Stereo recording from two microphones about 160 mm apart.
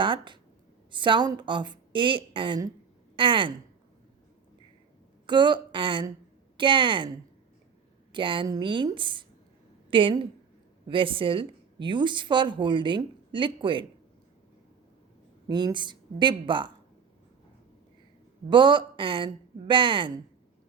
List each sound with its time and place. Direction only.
0.0 s a woman's voice: 30° right (ahead or behind)
5.2 s a woman's voice: 30° right (ahead or behind)
15.4 s a woman's voice: 25° right (ahead or behind)
18.4 s a woman's voice: 30° right (ahead or behind)